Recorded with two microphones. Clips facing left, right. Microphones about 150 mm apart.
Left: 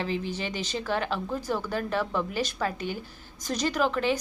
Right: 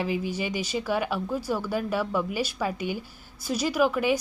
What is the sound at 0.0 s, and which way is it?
A woman's voice, 10° right (ahead or behind).